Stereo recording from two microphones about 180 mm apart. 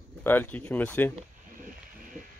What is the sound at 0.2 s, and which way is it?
Speech, 10° left (ahead or behind).